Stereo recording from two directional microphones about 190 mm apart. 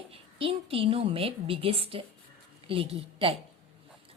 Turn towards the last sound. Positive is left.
turn(degrees=-30)  # may be behind; listen again after turning